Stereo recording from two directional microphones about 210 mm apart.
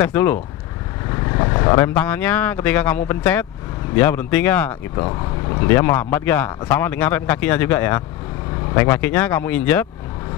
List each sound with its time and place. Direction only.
0.0 s speech: 10° left (ahead or behind)
4.9 s speech: 20° left (ahead or behind)